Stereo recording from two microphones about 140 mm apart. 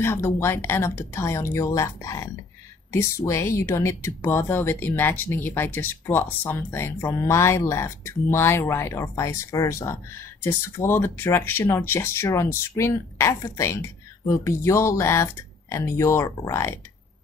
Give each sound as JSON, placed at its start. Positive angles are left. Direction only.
{"t": 0.0, "sound": "speech", "side_deg": 15}